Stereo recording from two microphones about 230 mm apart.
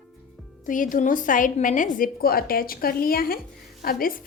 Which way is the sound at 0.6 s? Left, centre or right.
Left.